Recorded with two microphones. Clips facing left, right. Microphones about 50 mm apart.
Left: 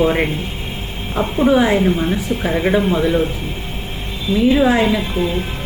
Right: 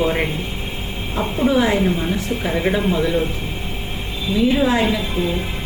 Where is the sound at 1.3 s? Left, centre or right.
Centre.